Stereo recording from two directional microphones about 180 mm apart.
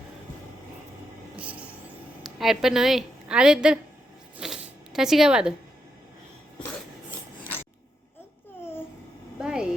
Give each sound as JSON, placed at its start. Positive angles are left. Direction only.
{"t": 1.4, "sound": "vehicle", "side_deg": -10}
{"t": 2.2, "sound": "a woman's voice", "side_deg": 0}
{"t": 4.4, "sound": "zipper", "side_deg": -5}
{"t": 9.4, "sound": "a sound", "side_deg": -5}